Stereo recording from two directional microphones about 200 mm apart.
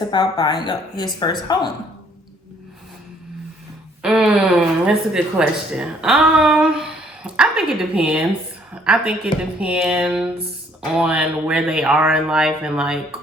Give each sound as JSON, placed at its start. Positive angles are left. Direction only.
{"t": 0.1, "sound": "speech", "side_deg": 20}
{"t": 4.0, "sound": "speech", "side_deg": -5}